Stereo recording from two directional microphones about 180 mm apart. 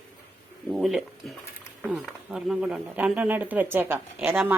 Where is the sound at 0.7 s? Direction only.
Centre (ahead or behind).